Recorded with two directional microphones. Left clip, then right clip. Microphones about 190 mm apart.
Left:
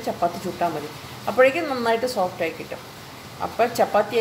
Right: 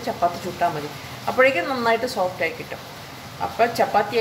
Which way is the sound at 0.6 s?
25° left (ahead or behind).